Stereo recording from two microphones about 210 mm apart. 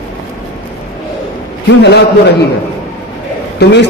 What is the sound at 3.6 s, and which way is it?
Speech, 55° left (ahead or behind).